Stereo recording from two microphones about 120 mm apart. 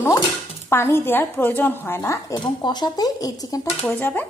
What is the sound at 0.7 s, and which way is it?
Speech, 20° left (ahead or behind).